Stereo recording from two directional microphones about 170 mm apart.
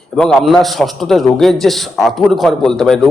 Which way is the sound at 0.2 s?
5° left (ahead or behind).